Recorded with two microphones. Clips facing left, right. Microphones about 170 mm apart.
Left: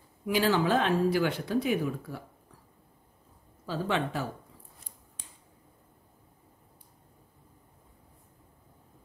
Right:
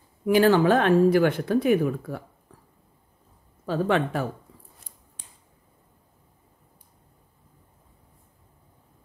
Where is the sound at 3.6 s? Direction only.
55° right (ahead or behind).